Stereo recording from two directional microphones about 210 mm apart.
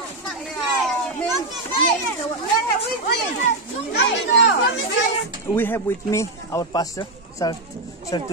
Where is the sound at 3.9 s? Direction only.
55° left (ahead or behind).